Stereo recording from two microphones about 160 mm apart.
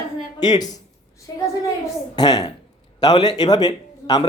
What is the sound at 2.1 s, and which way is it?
A man's voice, 25° left (ahead or behind).